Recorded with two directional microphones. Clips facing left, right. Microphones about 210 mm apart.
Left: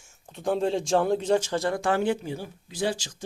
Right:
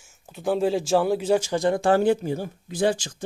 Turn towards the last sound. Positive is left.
turn(degrees=-50)  # may be behind; listen again after turning